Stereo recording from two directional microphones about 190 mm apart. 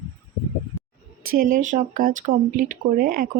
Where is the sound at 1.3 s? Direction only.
45° right (ahead or behind).